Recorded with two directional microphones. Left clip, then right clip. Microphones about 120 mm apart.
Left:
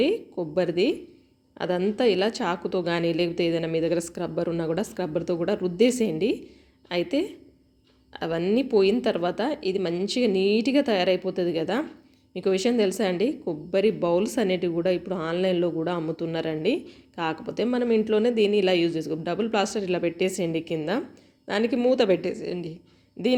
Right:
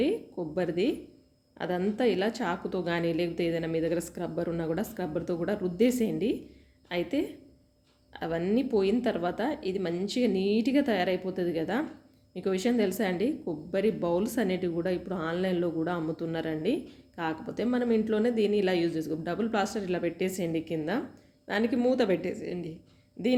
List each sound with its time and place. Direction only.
0.0 s a woman's voice: 20° left (ahead or behind)